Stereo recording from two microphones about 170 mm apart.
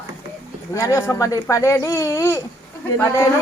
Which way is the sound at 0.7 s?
20° left (ahead or behind).